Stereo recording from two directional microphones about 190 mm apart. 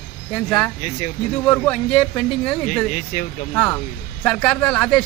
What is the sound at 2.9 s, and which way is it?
Speech, 50° left (ahead or behind).